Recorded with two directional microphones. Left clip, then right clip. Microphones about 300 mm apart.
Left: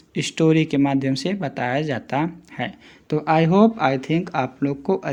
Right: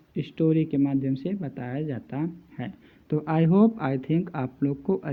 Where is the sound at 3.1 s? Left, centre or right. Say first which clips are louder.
Left 7 dB; centre.